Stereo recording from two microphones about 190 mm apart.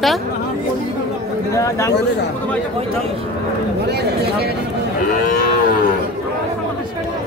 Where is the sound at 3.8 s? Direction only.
60° right (ahead or behind).